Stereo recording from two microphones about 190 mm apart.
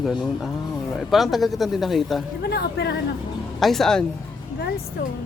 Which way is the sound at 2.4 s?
60° left (ahead or behind).